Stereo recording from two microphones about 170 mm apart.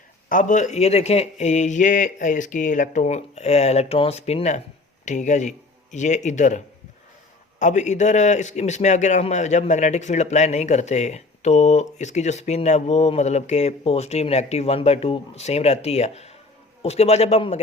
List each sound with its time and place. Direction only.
0.3 s a man's voice: 50° left (ahead or behind)
7.6 s a man's voice: 45° left (ahead or behind)